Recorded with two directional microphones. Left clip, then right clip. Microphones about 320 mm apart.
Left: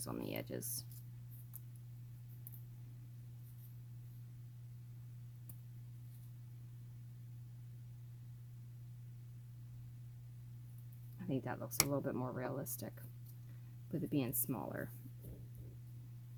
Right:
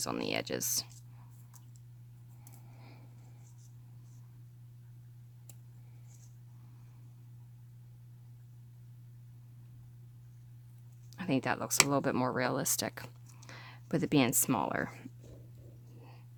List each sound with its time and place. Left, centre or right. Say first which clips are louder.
0.0 s speech: right 10 dB; centre
11.2 s speech: right 10 dB; right